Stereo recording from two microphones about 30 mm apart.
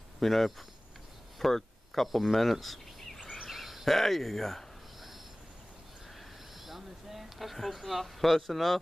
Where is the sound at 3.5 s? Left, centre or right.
Centre.